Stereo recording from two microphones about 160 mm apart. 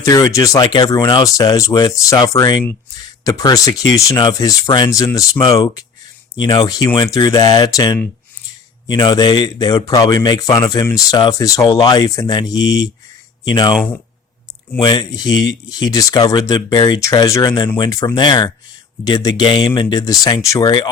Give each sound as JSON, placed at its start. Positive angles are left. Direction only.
{"t": 0.0, "sound": "speech", "side_deg": 20}
{"t": 14.8, "sound": "speech", "side_deg": 25}